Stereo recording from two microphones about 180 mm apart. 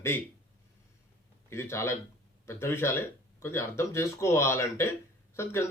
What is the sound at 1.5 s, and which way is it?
Speech, 15° left (ahead or behind).